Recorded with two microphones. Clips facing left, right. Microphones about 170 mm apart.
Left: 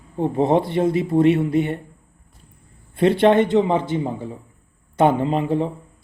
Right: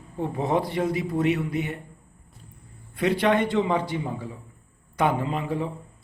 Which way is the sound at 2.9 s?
25° left (ahead or behind).